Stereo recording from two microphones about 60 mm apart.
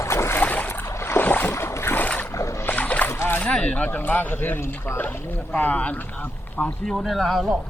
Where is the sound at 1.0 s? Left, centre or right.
Left.